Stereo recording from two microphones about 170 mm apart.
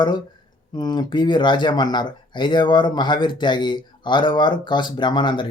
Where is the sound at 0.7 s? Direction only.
25° left (ahead or behind).